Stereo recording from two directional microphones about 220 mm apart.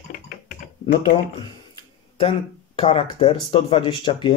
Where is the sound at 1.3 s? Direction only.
20° left (ahead or behind).